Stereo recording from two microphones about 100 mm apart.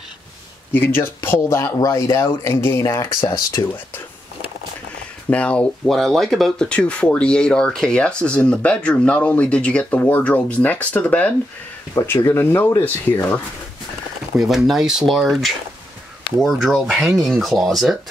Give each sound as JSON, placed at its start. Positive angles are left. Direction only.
{"t": 0.7, "sound": "speech", "side_deg": 20}
{"t": 5.3, "sound": "speech", "side_deg": 10}
{"t": 11.9, "sound": "speech", "side_deg": 30}
{"t": 14.3, "sound": "speech", "side_deg": -5}